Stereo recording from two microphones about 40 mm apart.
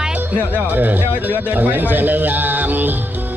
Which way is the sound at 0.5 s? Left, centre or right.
Right.